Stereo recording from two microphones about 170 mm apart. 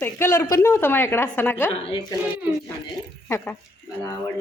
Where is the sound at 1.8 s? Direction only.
25° left (ahead or behind).